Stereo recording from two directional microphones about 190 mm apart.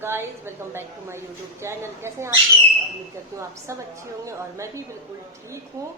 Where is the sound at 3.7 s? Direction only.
15° right (ahead or behind).